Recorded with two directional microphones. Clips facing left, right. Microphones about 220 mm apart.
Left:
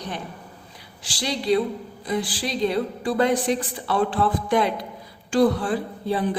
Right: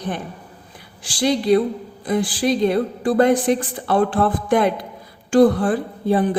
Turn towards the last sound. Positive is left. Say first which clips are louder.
# right 6 dB
turn(degrees=-50)  # may be behind; listen again after turning